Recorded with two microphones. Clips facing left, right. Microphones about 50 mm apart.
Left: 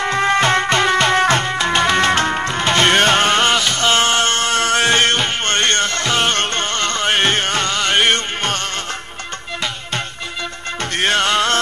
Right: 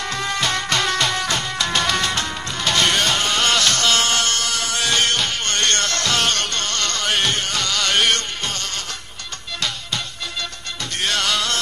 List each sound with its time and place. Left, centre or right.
0.0 s music: left
3.4 s a sound: centre
3.8 s music: left
11.0 s music: left